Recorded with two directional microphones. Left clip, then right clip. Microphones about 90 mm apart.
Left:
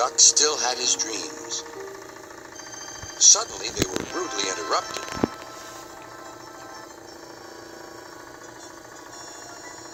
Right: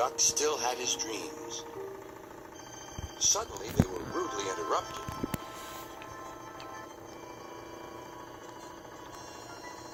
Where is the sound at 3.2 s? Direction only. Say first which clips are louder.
Left 12 dB; 75° left (ahead or behind).